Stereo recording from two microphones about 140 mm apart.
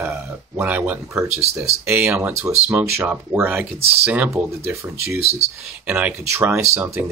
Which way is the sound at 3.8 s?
45° right (ahead or behind).